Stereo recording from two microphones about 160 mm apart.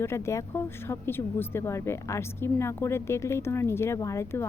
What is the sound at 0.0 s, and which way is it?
Speech, 15° left (ahead or behind).